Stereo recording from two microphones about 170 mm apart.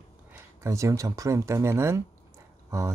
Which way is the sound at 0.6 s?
20° right (ahead or behind).